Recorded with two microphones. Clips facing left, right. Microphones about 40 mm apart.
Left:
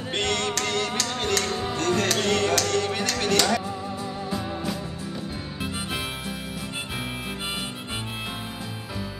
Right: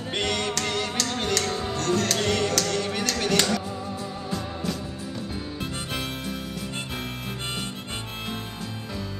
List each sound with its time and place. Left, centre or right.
0.1 s music: centre
1.8 s music: left
2.0 s music: centre